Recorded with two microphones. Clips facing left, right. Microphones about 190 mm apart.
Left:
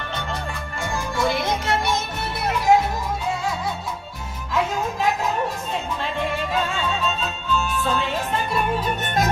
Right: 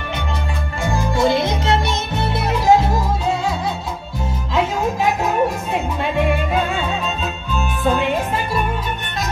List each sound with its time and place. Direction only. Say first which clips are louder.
0.8 s music: right 6 dB; 25° right (ahead or behind)
7.5 s music: right 4 dB; 15° right (ahead or behind)